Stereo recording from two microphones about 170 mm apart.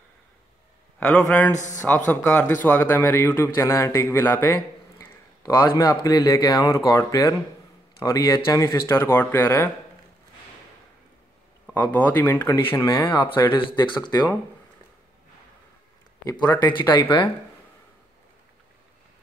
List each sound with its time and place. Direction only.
0.9 s a man's voice: 5° left (ahead or behind)
1.5 s speech: 45° left (ahead or behind)
2.0 s a man's voice: 10° left (ahead or behind)
11.7 s a man's voice: 10° left (ahead or behind); by 14.1 s 30° left (ahead or behind)
16.3 s speech: 25° left (ahead or behind)